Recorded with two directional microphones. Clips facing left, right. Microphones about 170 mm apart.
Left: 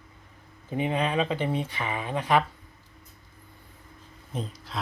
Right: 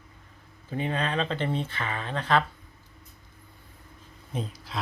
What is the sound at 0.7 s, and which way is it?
Speech, 15° left (ahead or behind).